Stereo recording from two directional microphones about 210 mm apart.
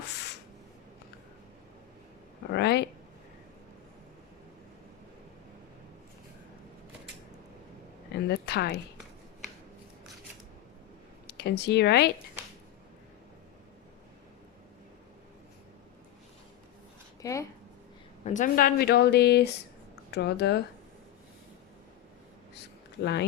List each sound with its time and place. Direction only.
0.1 s spray: 55° left (ahead or behind)
2.5 s speech: 55° left (ahead or behind)
8.1 s a sound: 50° left (ahead or behind)
11.3 s speech: 55° left (ahead or behind)
17.2 s a sound: 15° left (ahead or behind)
18.3 s speech: 35° left (ahead or behind); by 20.6 s 55° left (ahead or behind)